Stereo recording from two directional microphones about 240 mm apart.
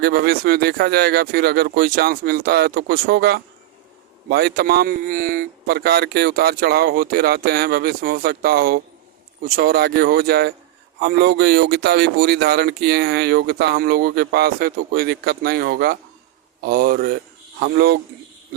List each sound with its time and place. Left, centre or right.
0.0 s speech: right